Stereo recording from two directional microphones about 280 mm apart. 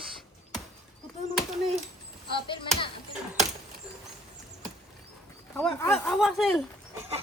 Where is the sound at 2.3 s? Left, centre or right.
Centre.